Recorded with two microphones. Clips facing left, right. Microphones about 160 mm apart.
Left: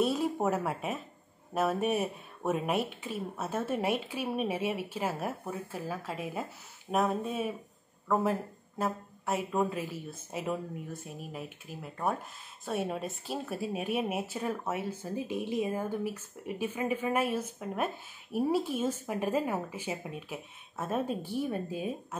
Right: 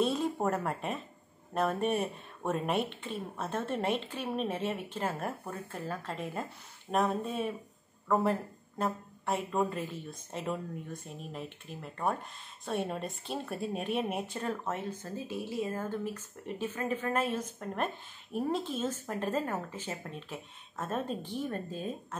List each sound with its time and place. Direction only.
0.0 s a woman's voice: 5° left (ahead or behind)